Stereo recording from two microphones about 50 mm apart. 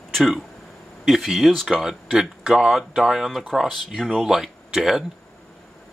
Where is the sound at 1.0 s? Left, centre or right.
Centre.